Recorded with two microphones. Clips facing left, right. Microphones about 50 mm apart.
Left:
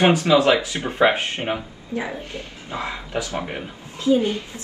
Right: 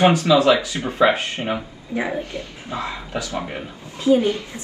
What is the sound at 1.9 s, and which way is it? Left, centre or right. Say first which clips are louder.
Speech: right 4 dB; right.